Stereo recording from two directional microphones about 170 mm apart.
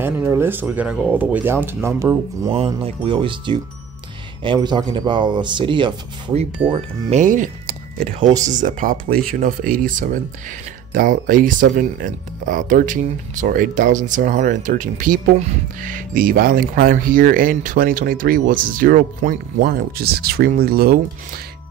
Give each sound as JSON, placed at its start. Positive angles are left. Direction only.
{"t": 0.0, "sound": "speech", "side_deg": -15}
{"t": 2.5, "sound": "speech", "side_deg": -35}
{"t": 6.7, "sound": "speech", "side_deg": -45}
{"t": 8.2, "sound": "speech", "side_deg": -20}
{"t": 8.5, "sound": "speech", "side_deg": -50}